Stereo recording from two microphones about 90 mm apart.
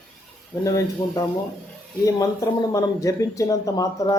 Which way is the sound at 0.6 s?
40° left (ahead or behind).